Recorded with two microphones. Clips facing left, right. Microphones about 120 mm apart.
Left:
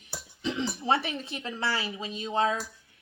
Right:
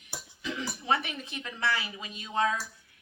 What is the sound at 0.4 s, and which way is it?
Speech, 25° left (ahead or behind).